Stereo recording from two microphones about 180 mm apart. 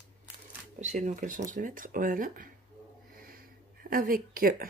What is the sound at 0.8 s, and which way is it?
A woman's voice, 40° right (ahead or behind).